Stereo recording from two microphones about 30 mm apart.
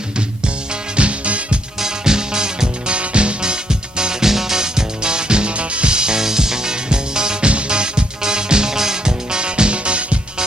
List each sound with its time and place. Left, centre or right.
0.9 s music: right
1.8 s music: right